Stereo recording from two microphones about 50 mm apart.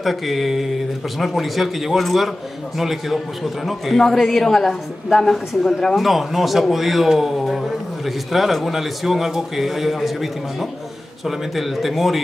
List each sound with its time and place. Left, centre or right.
0.0 s a man's voice: centre